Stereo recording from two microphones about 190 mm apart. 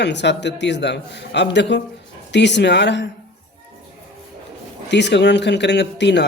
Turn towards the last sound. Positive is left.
turn(degrees=65)  # may be behind; listen again after turning